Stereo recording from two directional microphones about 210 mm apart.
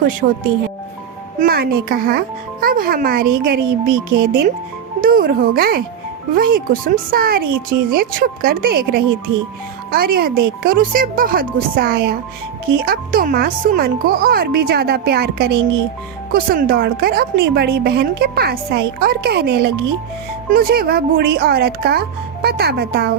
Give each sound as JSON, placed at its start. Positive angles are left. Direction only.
{"t": 0.2, "sound": "a child's voice", "side_deg": -40}